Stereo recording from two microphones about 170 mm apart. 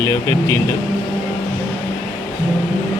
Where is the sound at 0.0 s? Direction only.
15° left (ahead or behind).